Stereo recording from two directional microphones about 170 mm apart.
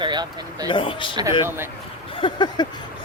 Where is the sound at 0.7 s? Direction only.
30° left (ahead or behind).